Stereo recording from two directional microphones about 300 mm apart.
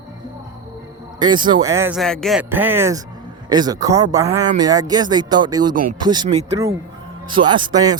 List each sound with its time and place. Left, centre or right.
1.2 s speech: centre
5.7 s speech: right
6.0 s speech: centre